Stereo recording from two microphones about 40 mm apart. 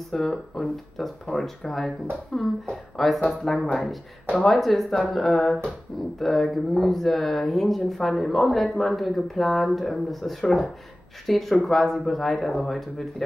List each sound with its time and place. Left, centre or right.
0.1 s speech: centre
3.6 s speech: left
4.4 s speech: centre